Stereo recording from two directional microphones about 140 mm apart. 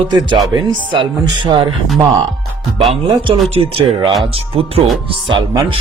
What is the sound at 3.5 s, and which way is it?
Speech, 45° right (ahead or behind).